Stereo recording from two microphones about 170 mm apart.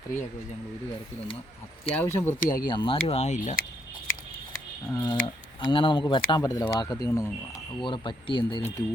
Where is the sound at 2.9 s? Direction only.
35° left (ahead or behind).